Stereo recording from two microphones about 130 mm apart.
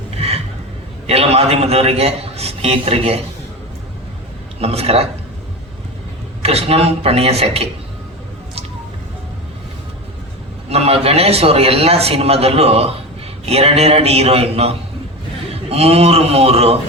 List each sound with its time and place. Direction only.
0.2 s a sound: 50° right (ahead or behind)
1.0 s a man's voice: 50° right (ahead or behind)
4.6 s a man's voice: 50° right (ahead or behind)
6.4 s a man's voice: 50° right (ahead or behind)
10.7 s a man's voice: 50° right (ahead or behind)